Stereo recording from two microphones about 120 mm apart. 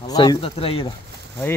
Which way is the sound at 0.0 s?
35° left (ahead or behind).